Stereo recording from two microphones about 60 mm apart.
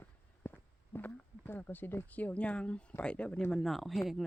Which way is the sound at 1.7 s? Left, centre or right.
Left.